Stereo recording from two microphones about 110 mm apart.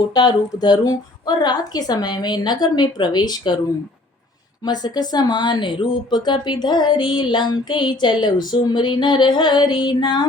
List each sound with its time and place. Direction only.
0.1 s a woman's voice: 40° left (ahead or behind)
4.6 s speech: 40° left (ahead or behind)